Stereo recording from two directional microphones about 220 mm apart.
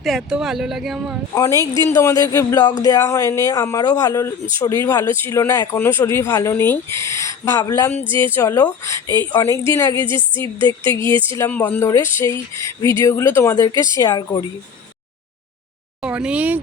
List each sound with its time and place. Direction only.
0.0 s speech: centre (ahead or behind)
1.4 s speech: 15° left (ahead or behind)
8.0 s music: 25° right (ahead or behind)
8.4 s speech: 15° left (ahead or behind)
10.1 s music: 20° right (ahead or behind)
10.9 s speech: 15° left (ahead or behind)
16.0 s speech: 5° right (ahead or behind)